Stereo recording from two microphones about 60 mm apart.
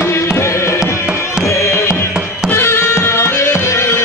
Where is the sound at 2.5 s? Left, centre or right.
Left.